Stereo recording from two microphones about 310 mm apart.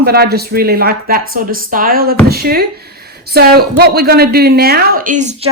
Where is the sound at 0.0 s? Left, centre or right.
Right.